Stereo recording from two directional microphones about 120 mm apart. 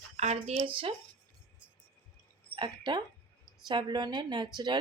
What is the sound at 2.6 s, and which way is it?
Speech, 40° right (ahead or behind).